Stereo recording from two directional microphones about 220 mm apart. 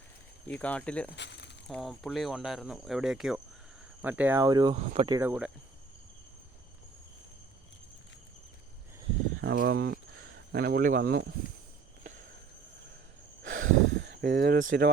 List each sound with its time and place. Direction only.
0.4 s speech: 5° left (ahead or behind)
1.1 s a sound: 50° left (ahead or behind)
1.6 s speech: centre (ahead or behind); by 4.8 s 20° right (ahead or behind)
4.8 s speech: 30° right (ahead or behind)
5.0 s speech: 15° right (ahead or behind)
9.4 s speech: 50° right (ahead or behind)
13.6 s a sound: 60° right (ahead or behind); by 14.8 s 45° right (ahead or behind)